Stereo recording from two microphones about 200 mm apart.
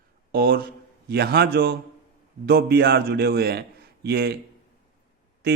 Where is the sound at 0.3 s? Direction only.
50° right (ahead or behind).